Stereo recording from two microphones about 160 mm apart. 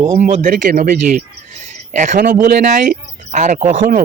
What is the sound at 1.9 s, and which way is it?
Speech, 50° right (ahead or behind).